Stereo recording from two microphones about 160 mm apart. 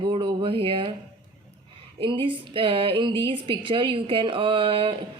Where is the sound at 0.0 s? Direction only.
30° right (ahead or behind).